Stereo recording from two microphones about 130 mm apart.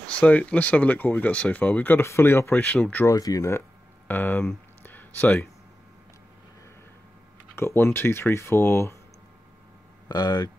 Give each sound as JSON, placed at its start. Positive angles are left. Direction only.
{"t": 0.0, "sound": "speech", "side_deg": 10}
{"t": 3.1, "sound": "speech", "side_deg": 25}
{"t": 7.5, "sound": "speech", "side_deg": 20}
{"t": 10.0, "sound": "speech", "side_deg": 30}